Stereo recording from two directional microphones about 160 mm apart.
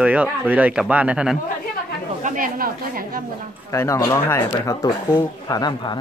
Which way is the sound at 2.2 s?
55° right (ahead or behind).